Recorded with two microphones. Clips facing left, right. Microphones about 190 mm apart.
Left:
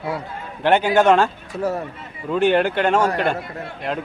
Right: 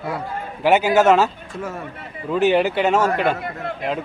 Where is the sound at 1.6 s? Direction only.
40° left (ahead or behind).